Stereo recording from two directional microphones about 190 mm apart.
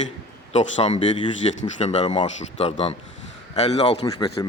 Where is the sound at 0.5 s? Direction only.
35° left (ahead or behind).